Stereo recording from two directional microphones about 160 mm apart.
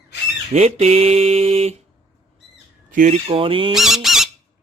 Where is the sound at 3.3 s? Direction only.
35° right (ahead or behind).